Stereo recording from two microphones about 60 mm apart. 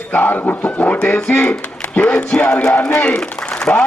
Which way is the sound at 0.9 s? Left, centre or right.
Centre.